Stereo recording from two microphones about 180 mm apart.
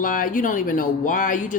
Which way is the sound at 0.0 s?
50° left (ahead or behind).